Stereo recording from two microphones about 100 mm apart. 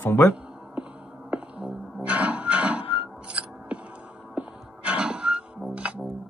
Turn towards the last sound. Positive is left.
turn(degrees=-15)  # may be behind; listen again after turning